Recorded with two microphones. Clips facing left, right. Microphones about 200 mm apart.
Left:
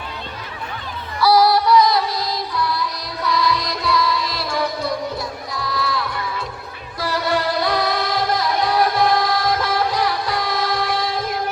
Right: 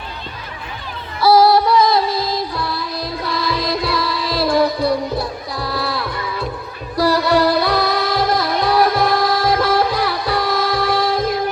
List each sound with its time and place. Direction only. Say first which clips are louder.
1.2 s music: right 3 dB; 25° right (ahead or behind)